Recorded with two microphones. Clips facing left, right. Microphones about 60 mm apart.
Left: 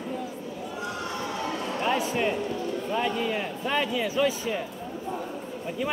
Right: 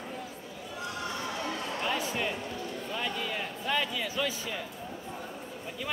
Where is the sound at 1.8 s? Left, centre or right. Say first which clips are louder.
Left 7 dB; left.